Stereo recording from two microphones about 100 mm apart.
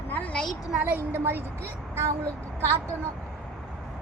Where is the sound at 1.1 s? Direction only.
20° right (ahead or behind).